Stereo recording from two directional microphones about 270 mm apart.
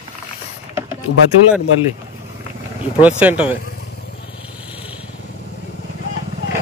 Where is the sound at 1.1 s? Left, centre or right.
Left.